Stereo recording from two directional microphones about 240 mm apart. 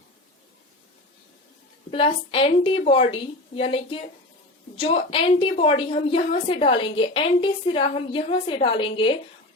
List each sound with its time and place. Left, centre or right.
1.9 s a woman's voice: left